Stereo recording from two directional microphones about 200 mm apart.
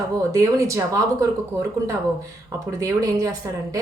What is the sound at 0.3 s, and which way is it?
Speech, 15° right (ahead or behind).